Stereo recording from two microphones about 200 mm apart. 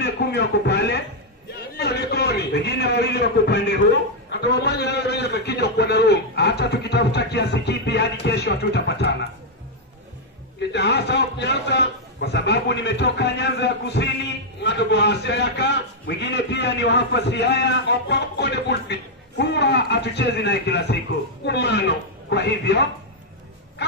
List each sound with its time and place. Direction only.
0.0 s music: 55° left (ahead or behind)
1.8 s a man's voice: 55° left (ahead or behind)
10.7 s a man's voice: 55° left (ahead or behind)